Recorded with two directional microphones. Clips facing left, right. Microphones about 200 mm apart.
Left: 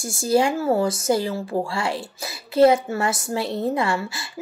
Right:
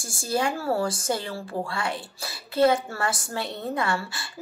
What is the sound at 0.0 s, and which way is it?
Speech, 25° left (ahead or behind).